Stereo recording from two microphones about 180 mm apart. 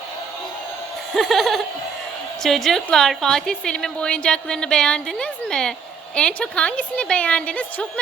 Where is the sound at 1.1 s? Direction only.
Centre (ahead or behind).